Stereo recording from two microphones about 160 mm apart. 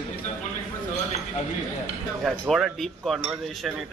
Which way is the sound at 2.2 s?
Centre (ahead or behind).